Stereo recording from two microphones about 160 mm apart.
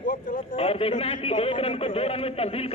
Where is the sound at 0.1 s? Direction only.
55° left (ahead or behind).